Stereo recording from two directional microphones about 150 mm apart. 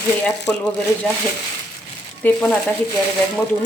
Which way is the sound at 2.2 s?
10° left (ahead or behind).